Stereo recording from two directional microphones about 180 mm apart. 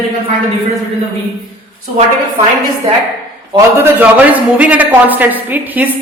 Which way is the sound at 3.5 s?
10° right (ahead or behind).